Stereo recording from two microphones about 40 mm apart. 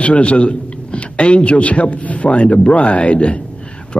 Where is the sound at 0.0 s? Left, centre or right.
Left.